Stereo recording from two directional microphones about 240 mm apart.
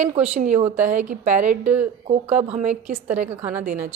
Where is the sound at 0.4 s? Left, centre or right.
Right.